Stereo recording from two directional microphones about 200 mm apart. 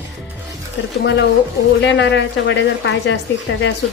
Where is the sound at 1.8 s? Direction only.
60° left (ahead or behind).